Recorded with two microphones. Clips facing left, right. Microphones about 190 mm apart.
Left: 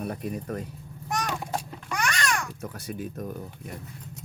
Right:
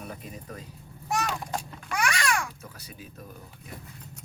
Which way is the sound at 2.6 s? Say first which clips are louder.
Left 11 dB; 50° left (ahead or behind).